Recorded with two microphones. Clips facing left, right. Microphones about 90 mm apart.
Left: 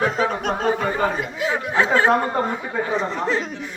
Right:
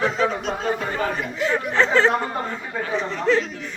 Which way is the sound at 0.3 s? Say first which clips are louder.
Left 3 dB; 50° left (ahead or behind).